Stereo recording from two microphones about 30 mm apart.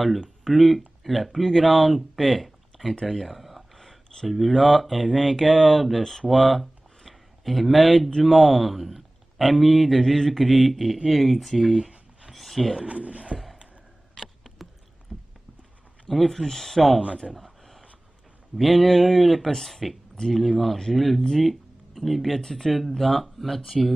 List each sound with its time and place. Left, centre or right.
0.4 s speech: centre
3.7 s a sound: centre
4.3 s speech: centre
10.4 s speech: centre
12.3 s a sound: centre
12.8 s speech: right
14.1 s a sound: centre
16.1 s speech: centre
17.3 s a sound: centre
18.6 s speech: centre
22.4 s speech: centre
22.7 s speech: centre